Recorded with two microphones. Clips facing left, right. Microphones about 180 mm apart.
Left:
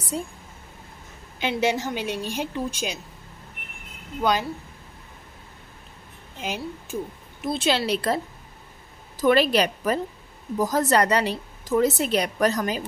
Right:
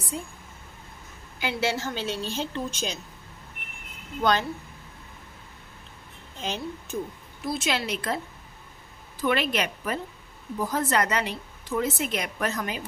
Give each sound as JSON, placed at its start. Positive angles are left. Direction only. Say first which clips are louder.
{"t": 1.4, "sound": "a woman's voice", "louder": "left 4 dB", "side_deg": 20}
{"t": 4.2, "sound": "a woman's voice", "louder": "left 1 dB", "side_deg": 10}
{"t": 6.4, "sound": "a woman's voice", "louder": "left 1 dB", "side_deg": 10}
{"t": 7.4, "sound": "a woman's voice", "louder": "left 5 dB", "side_deg": 30}
{"t": 9.2, "sound": "a woman's voice", "louder": "left 6 dB", "side_deg": 35}